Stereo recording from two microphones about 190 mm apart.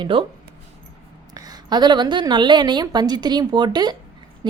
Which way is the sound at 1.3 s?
20° right (ahead or behind).